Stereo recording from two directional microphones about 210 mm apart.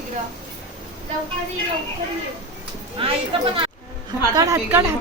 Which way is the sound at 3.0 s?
25° right (ahead or behind).